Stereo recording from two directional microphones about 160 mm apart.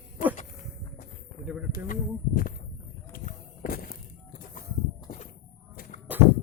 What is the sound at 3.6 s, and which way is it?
Music, 65° left (ahead or behind).